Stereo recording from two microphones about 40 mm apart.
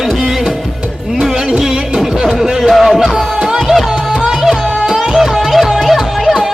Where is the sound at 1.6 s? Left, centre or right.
Centre.